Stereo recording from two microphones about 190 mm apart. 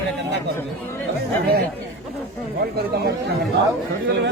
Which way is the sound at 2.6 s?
55° right (ahead or behind).